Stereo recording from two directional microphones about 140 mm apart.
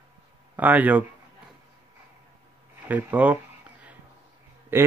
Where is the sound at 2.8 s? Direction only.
10° right (ahead or behind).